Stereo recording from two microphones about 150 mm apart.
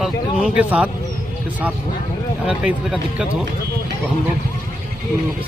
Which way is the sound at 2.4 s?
5° right (ahead or behind).